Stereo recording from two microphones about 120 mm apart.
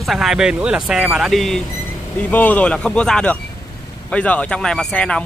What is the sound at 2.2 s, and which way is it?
Speech, 15° left (ahead or behind).